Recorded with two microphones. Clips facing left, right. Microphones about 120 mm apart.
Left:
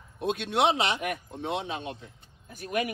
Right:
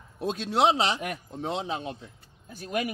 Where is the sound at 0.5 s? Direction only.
35° right (ahead or behind).